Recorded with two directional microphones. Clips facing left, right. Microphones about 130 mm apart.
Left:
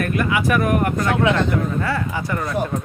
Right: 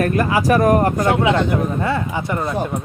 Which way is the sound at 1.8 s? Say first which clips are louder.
Right 2 dB; 20° right (ahead or behind).